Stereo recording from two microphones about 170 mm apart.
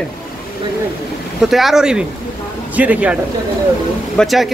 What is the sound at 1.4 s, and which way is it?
A man's voice, centre (ahead or behind).